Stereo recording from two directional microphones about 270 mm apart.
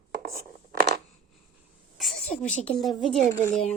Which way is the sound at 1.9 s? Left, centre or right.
Centre.